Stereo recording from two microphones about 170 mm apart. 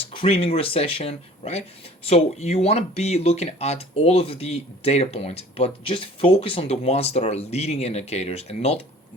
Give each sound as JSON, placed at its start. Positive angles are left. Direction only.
{"t": 0.0, "sound": "speech", "side_deg": 30}